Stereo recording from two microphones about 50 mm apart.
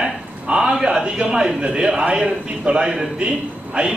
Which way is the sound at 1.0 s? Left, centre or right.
Centre.